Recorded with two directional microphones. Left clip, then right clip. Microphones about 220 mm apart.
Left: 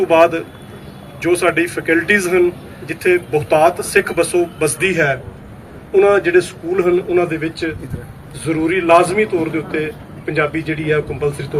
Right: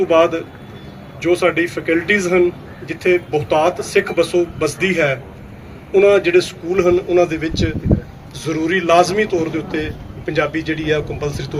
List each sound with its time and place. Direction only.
0.0 s speech: 50° right (ahead or behind)